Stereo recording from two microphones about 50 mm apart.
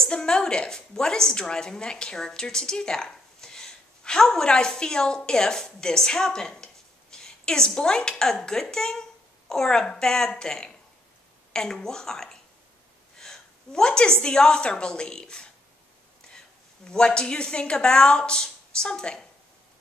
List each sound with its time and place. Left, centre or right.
0.0 s a woman's voice: centre
13.2 s a sound: centre
14.2 s a woman's voice: centre